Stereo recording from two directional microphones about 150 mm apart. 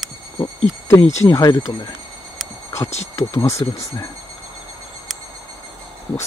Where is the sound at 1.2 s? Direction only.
20° left (ahead or behind).